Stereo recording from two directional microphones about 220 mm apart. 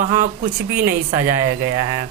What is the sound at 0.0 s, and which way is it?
Speech, 40° right (ahead or behind).